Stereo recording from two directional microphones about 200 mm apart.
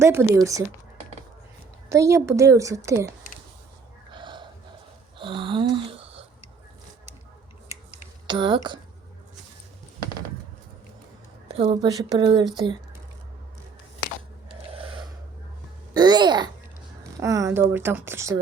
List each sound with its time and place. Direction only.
0.0 s a woman's voice: 10° right (ahead or behind)
1.9 s a woman's voice: 15° right (ahead or behind)
4.1 s wheeze: 25° right (ahead or behind)
5.1 s a sound: 25° right (ahead or behind)
8.3 s speech: 25° right (ahead or behind)
11.4 s speech: 30° right (ahead or behind)
14.7 s a sound: 25° right (ahead or behind)
16.0 s a woman's voice: 20° right (ahead or behind)